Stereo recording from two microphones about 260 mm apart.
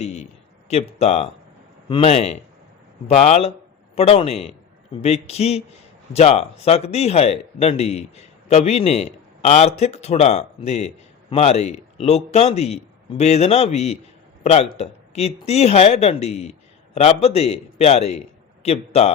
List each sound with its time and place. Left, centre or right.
0.0 s a man's voice: left